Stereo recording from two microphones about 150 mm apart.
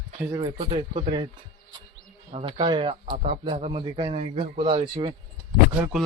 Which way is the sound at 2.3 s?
35° right (ahead or behind).